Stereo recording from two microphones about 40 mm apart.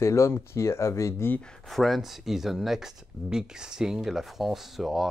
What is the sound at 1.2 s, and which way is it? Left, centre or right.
Speech, left.